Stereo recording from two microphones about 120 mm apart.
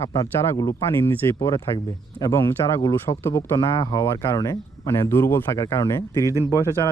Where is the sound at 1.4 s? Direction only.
30° left (ahead or behind).